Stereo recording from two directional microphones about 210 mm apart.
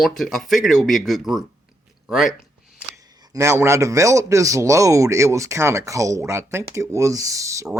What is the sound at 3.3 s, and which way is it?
Speech, 10° right (ahead or behind).